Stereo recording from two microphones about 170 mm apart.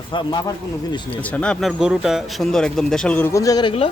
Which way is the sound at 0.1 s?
30° left (ahead or behind).